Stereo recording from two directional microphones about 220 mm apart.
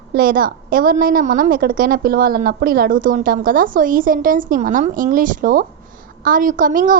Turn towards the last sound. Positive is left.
turn(degrees=-40)  # may be behind; listen again after turning